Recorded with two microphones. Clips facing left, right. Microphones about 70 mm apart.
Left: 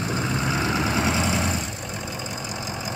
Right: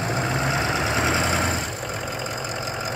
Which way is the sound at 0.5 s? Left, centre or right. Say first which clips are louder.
Even; centre.